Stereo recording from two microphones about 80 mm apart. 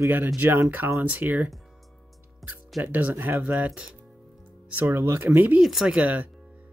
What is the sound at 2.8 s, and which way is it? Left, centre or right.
Speech, right.